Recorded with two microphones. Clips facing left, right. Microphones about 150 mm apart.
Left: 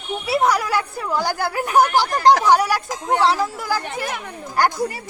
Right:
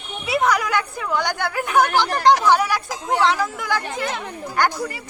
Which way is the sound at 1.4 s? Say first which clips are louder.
Left 2 dB; 35° left (ahead or behind).